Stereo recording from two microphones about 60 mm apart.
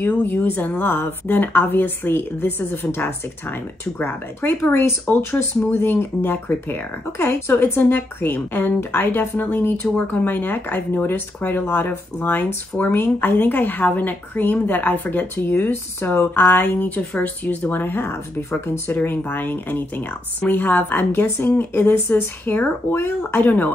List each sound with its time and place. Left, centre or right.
0.0 s speech: left
15.6 s speech: left
16.3 s speech: left